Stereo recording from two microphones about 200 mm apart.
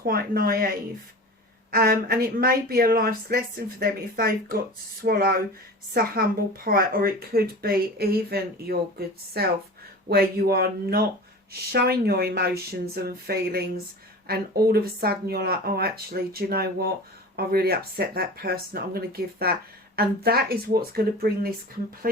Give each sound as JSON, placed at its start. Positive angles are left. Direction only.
{"t": 0.0, "sound": "speech", "side_deg": -50}
{"t": 1.7, "sound": "speech", "side_deg": -50}